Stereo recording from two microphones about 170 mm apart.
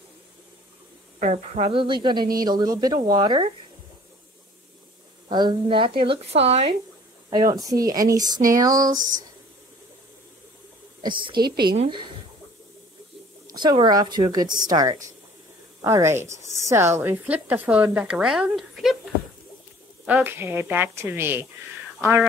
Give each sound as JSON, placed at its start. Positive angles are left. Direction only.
{"t": 1.2, "sound": "speech", "side_deg": -40}
{"t": 5.3, "sound": "speech", "side_deg": -25}
{"t": 7.2, "sound": "speech", "side_deg": -25}
{"t": 11.4, "sound": "speech", "side_deg": -65}
{"t": 11.7, "sound": "speech", "side_deg": -40}
{"t": 13.5, "sound": "a woman's voice", "side_deg": -25}
{"t": 20.1, "sound": "a woman's voice", "side_deg": -10}